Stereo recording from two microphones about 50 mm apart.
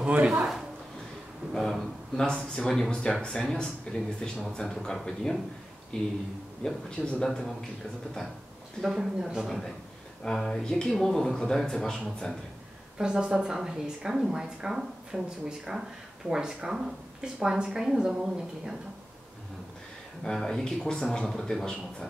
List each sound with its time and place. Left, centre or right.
0.0 s a man's voice: right
1.5 s speech: centre
7.2 s speech: centre
8.8 s speech: centre
10.2 s speech: centre
12.9 s a woman's voice: centre
20.2 s speech: centre